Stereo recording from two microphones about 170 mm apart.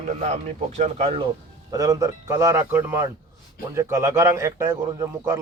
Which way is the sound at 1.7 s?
20° right (ahead or behind).